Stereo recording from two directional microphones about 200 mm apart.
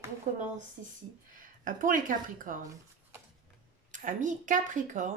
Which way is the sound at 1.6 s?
40° right (ahead or behind).